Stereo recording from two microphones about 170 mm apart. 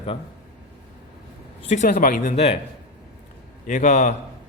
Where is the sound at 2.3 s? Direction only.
35° left (ahead or behind).